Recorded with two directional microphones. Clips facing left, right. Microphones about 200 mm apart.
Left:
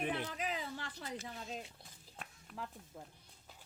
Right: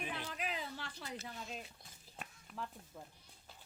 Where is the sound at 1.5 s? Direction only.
30° left (ahead or behind).